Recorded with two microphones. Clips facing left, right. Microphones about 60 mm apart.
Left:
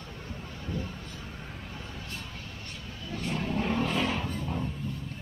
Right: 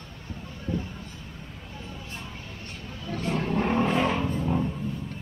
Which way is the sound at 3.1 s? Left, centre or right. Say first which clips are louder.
Right 4 dB; right.